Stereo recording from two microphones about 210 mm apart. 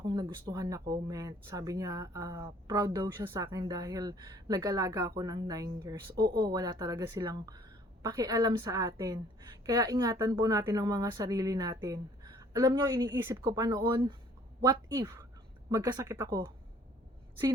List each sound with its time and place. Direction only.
0.0 s speech: 20° right (ahead or behind)